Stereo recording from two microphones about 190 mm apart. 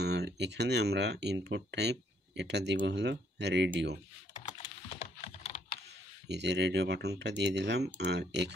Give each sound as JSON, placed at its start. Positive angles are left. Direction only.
{"t": 0.0, "sound": "speech", "side_deg": -60}
{"t": 4.9, "sound": "computer keyboard", "side_deg": 30}
{"t": 6.2, "sound": "speech", "side_deg": -65}